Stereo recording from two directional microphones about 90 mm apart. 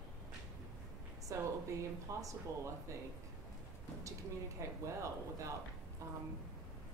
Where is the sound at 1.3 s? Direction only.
35° right (ahead or behind).